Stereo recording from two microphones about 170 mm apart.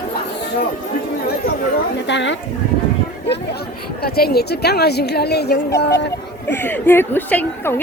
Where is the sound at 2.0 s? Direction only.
90° left.